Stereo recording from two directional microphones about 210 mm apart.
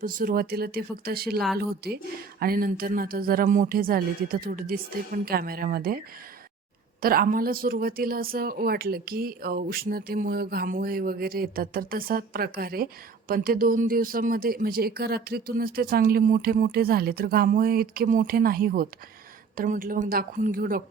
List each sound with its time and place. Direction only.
0.0 s speech: 40° right (ahead or behind)
7.0 s a woman's voice: 45° right (ahead or behind)